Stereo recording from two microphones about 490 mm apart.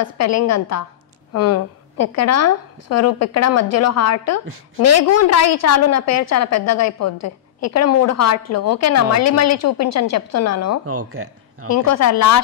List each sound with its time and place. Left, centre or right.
0.0 s a woman's voice: left
10.9 s speech: right
11.7 s a woman's voice: left